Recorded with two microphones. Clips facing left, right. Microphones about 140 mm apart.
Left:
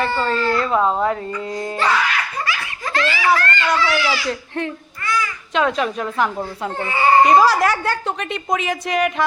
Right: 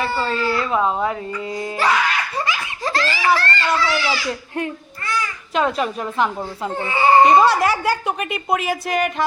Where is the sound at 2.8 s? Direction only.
35° right (ahead or behind).